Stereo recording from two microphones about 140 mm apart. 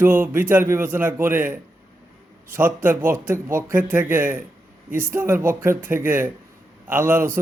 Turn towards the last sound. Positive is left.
turn(degrees=-15)  # may be behind; listen again after turning